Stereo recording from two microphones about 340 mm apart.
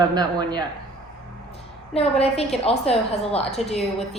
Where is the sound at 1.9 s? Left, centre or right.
Centre.